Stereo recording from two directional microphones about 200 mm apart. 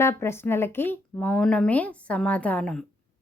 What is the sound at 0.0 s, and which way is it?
A woman's voice, 15° left (ahead or behind).